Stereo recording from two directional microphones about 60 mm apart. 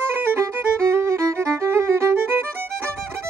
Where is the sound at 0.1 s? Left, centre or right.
Right.